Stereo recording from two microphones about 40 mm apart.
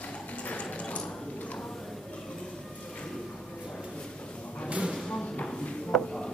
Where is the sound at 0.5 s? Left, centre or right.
Left.